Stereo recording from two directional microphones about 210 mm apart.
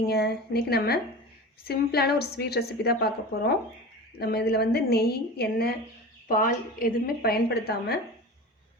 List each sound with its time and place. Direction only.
0.0 s a woman's voice: 50° left (ahead or behind)